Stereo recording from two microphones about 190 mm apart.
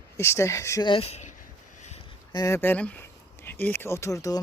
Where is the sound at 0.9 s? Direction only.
30° left (ahead or behind).